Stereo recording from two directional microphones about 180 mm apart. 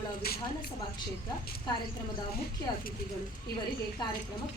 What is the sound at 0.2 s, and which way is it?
Speech, 60° left (ahead or behind).